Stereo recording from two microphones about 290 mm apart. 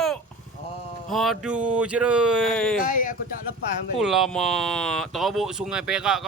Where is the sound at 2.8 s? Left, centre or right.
Left.